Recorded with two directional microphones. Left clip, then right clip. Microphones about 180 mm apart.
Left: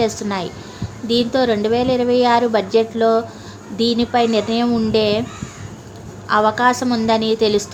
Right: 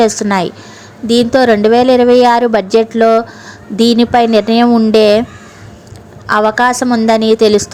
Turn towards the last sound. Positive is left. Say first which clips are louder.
# right 8 dB
turn(degrees=-45)  # may be behind; listen again after turning